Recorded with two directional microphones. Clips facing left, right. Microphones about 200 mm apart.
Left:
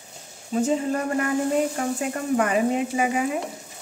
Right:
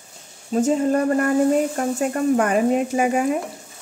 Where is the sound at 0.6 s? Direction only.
45° right (ahead or behind).